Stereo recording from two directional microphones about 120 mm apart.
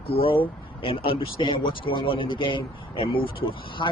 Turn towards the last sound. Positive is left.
turn(degrees=45)  # may be behind; listen again after turning